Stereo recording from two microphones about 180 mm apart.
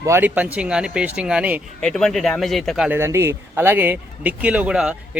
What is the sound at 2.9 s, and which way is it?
Speech, 15° right (ahead or behind).